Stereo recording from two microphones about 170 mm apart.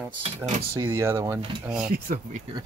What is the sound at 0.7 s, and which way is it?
Speech, 15° right (ahead or behind).